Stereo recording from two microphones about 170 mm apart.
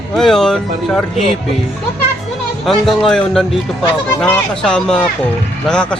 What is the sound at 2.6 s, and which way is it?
Speech, centre (ahead or behind).